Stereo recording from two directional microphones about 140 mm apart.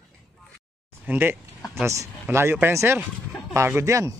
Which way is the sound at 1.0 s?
15° right (ahead or behind).